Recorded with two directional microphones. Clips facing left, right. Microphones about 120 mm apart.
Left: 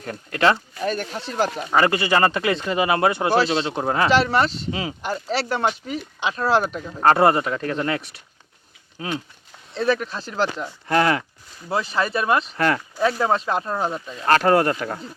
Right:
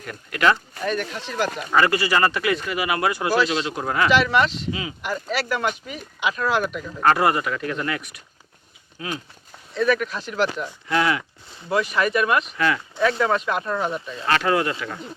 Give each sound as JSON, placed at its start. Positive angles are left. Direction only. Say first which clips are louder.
{"t": 0.0, "sound": "speech", "louder": "left 1 dB", "side_deg": 30}
{"t": 11.7, "sound": "speech", "louder": "right 2 dB", "side_deg": 30}
{"t": 12.5, "sound": "speech", "louder": "left 2 dB", "side_deg": 45}
{"t": 13.0, "sound": "speech", "louder": "right 1 dB", "side_deg": 30}
{"t": 14.3, "sound": "speech", "louder": "left 4 dB", "side_deg": 45}